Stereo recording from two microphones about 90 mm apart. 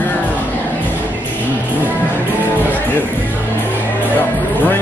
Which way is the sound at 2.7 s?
20° left (ahead or behind).